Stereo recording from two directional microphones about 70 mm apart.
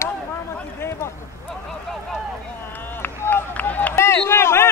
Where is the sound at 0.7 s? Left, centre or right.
Left.